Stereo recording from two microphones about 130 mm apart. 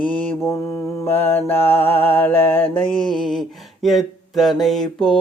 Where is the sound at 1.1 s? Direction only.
15° left (ahead or behind).